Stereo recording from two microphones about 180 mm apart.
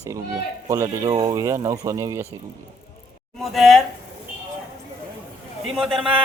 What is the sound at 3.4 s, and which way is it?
Speech, centre (ahead or behind).